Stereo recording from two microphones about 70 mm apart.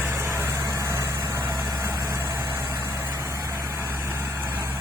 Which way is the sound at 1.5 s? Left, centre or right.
Right.